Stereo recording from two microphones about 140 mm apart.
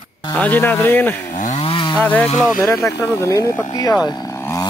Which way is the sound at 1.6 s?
40° left (ahead or behind).